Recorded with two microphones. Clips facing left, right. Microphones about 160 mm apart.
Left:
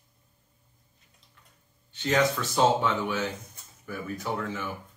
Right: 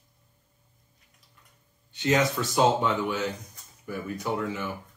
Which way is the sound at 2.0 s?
15° right (ahead or behind).